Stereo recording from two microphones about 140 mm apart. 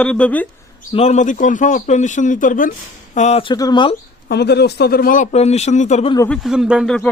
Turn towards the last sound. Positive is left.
turn(degrees=5)  # may be behind; listen again after turning